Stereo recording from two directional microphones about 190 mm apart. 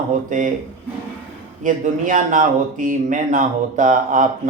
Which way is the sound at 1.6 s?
45° right (ahead or behind).